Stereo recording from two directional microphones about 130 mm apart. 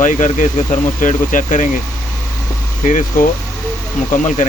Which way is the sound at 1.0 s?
75° left (ahead or behind).